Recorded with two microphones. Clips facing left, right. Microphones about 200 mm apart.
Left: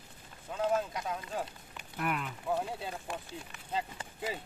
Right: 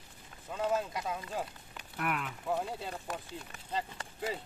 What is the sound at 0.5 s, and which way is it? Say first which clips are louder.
Speech: left 1 dB; centre (ahead or behind).